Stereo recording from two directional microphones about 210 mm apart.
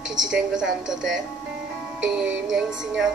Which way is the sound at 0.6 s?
5° right (ahead or behind).